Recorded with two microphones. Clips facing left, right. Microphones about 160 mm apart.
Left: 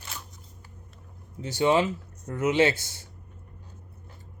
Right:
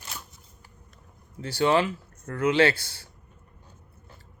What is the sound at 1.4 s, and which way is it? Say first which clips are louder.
Speech: even; 20° left (ahead or behind).